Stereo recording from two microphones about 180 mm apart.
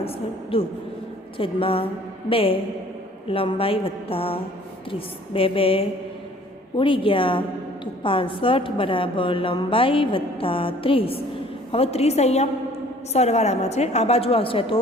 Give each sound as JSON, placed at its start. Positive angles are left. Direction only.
{"t": 0.0, "sound": "a woman's voice", "side_deg": 30}